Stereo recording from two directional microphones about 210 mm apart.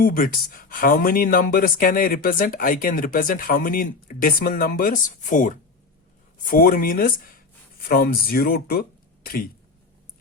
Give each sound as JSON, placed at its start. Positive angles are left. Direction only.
{"t": 0.0, "sound": "speech", "side_deg": 40}